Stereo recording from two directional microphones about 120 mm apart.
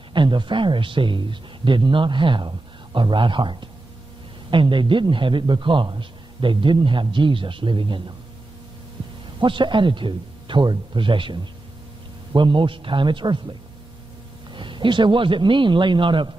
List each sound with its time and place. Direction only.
0.1 s a man's voice: 40° right (ahead or behind)
9.4 s a man's voice: 40° right (ahead or behind)
12.4 s a man's voice: 45° right (ahead or behind)